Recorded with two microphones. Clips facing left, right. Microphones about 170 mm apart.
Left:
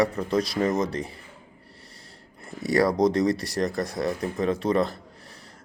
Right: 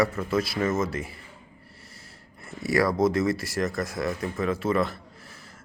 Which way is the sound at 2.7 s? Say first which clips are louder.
Left 2 dB; 35° left (ahead or behind).